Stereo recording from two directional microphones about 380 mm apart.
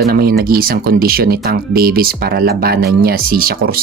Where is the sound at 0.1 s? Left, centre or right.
Right.